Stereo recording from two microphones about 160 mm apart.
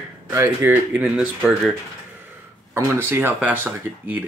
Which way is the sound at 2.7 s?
15° right (ahead or behind).